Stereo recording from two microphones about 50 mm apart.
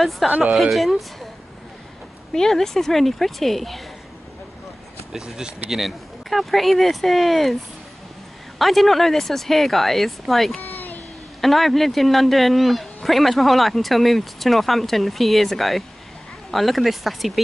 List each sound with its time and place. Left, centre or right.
0.0 s speech: centre
2.3 s speech: centre
5.1 s speech: centre
8.5 s speech: centre